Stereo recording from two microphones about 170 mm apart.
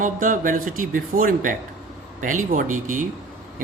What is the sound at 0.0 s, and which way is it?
A man's voice, 50° right (ahead or behind).